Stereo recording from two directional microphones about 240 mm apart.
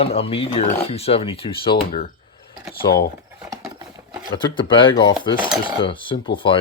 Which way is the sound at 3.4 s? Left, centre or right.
Centre.